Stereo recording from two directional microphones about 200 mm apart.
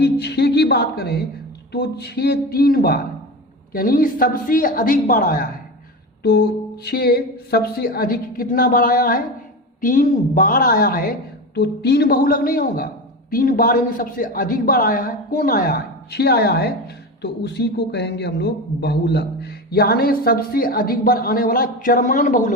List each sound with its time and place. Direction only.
0.0 s a man's voice: 55° left (ahead or behind)
6.8 s a man's voice: 50° left (ahead or behind)